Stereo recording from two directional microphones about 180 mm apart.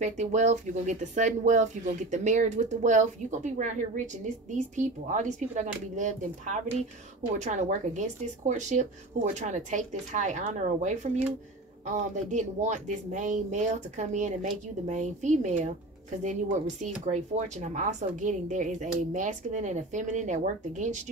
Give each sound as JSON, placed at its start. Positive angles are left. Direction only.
{"t": 0.0, "sound": "speech", "side_deg": -40}